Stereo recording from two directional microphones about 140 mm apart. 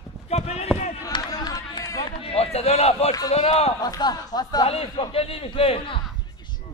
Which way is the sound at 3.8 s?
30° left (ahead or behind).